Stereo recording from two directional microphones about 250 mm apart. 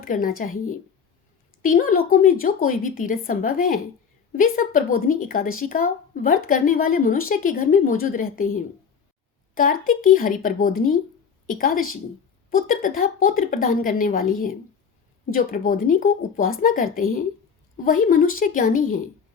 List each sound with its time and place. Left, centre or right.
0.0 s speech: left
1.6 s speech: left